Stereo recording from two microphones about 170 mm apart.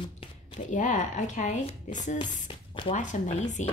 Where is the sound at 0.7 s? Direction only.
45° left (ahead or behind).